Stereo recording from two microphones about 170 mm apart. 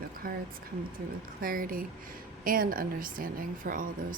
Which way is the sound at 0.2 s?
60° right (ahead or behind).